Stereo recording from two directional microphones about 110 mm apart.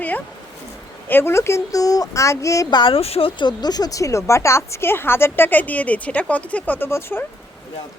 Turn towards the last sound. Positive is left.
turn(degrees=20)  # may be behind; listen again after turning